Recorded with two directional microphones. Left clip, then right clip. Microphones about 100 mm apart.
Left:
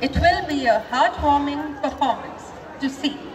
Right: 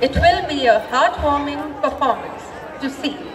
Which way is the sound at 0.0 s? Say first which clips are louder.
Right 4 dB; 25° right (ahead or behind).